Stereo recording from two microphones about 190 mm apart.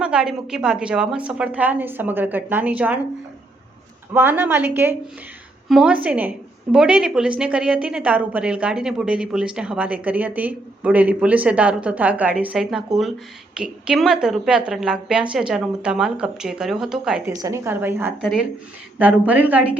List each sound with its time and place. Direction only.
0.0 s a woman's voice: 5° right (ahead or behind)
4.1 s a woman's voice: 10° right (ahead or behind)
17.3 s a woman's voice: 15° right (ahead or behind)